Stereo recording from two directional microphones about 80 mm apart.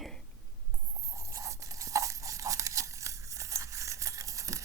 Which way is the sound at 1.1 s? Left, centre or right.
Right.